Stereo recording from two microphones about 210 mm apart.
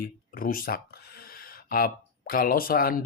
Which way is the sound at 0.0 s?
40° left (ahead or behind).